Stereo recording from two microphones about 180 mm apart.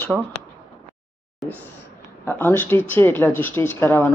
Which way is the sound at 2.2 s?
10° left (ahead or behind).